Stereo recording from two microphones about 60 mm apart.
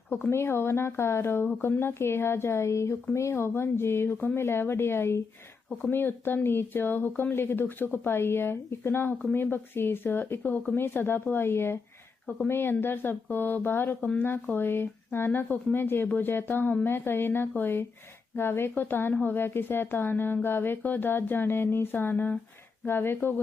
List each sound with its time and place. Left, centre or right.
0.3 s speech: left